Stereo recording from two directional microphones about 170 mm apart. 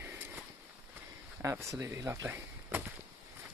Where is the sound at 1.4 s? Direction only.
20° right (ahead or behind).